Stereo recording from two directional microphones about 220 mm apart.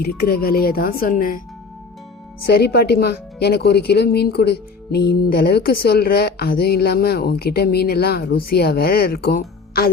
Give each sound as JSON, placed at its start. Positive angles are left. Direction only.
{"t": 0.0, "sound": "a woman's voice", "side_deg": 45}
{"t": 2.5, "sound": "a woman's voice", "side_deg": 45}